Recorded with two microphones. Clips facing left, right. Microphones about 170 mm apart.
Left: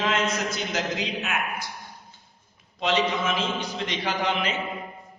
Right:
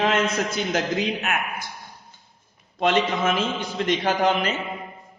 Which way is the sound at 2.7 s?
55° right (ahead or behind).